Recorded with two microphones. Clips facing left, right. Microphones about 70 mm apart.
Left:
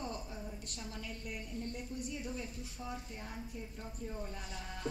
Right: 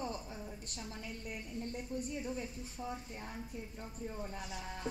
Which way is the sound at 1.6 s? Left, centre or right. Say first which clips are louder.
Right 3 dB; right.